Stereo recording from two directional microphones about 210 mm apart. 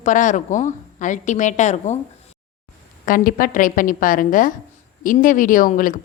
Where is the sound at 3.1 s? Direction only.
40° left (ahead or behind).